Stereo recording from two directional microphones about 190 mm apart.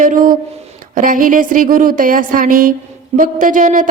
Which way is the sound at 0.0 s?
45° right (ahead or behind).